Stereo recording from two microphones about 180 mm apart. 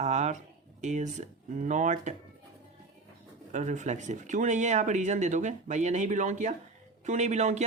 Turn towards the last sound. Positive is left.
turn(degrees=-40)  # may be behind; listen again after turning